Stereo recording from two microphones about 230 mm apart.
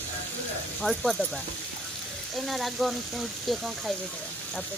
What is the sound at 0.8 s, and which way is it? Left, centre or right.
Speech, centre.